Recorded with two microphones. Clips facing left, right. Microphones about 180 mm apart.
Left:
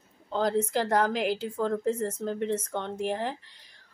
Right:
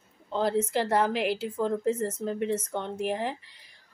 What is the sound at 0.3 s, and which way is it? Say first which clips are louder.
A woman's voice: even; 5° right (ahead or behind).